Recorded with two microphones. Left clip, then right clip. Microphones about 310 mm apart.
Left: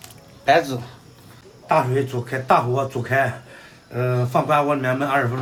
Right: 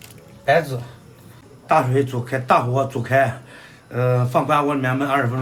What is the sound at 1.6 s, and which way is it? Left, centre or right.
Speech, centre.